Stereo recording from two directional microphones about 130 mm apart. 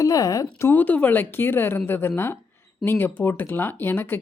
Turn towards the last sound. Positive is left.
turn(degrees=15)  # may be behind; listen again after turning